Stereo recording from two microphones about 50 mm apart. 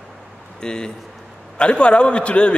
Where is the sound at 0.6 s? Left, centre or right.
Centre.